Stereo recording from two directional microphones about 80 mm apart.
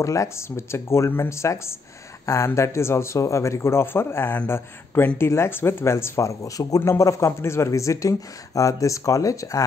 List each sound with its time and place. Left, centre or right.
0.0 s speech: left